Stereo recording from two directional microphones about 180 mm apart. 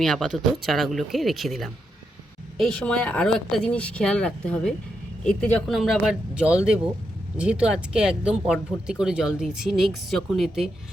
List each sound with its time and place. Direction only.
0.0 s speech: centre (ahead or behind)